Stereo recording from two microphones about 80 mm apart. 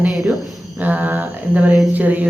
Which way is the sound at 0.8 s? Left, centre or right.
Right.